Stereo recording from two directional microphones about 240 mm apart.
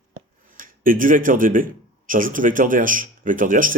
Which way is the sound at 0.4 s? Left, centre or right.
Right.